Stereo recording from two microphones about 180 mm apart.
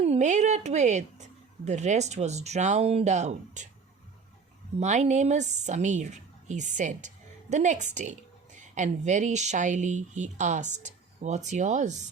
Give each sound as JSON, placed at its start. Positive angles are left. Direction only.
{"t": 0.0, "sound": "speech", "side_deg": -40}
{"t": 4.8, "sound": "a woman's voice", "side_deg": -40}